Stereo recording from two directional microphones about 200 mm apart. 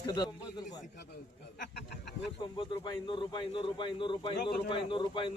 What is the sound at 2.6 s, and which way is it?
Speech, 25° left (ahead or behind).